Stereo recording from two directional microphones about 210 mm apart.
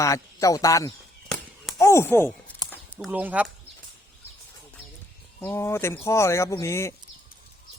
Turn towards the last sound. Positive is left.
turn(degrees=15)  # may be behind; listen again after turning